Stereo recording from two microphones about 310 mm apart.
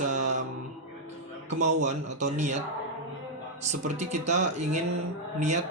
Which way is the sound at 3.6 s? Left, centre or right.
Right.